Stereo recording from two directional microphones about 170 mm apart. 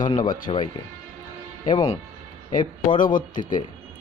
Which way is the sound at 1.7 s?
20° left (ahead or behind).